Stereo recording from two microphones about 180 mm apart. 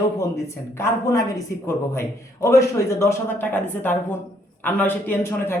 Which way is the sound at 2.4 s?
15° left (ahead or behind).